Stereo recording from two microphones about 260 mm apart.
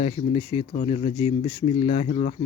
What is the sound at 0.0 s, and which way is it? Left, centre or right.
Speech, left.